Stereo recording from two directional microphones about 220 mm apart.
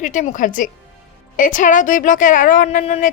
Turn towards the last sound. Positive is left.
turn(degrees=30)  # may be behind; listen again after turning